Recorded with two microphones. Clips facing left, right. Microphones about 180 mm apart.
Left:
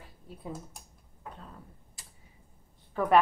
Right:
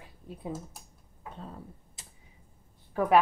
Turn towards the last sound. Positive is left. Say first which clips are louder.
# right 1 dB
turn(degrees=-10)  # may be behind; listen again after turning